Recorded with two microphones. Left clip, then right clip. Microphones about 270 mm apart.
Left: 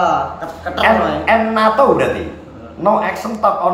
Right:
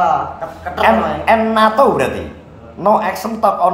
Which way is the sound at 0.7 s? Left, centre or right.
Centre.